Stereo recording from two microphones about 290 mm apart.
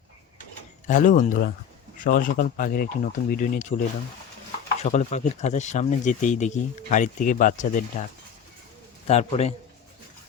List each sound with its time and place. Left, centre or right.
0.9 s speech: left
4.8 s speech: left
9.0 s speech: left